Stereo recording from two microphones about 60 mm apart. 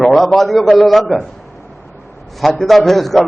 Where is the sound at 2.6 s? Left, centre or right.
Centre.